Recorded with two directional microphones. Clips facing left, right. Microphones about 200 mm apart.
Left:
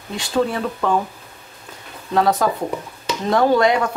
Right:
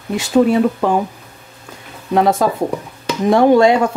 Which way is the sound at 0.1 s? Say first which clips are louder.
Right 8 dB; 20° right (ahead or behind).